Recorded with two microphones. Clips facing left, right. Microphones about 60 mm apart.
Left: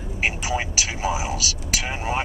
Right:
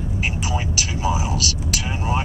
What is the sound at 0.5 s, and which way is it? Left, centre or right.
Speech, left.